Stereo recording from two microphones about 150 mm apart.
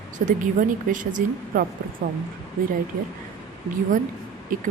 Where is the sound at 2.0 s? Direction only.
90° right.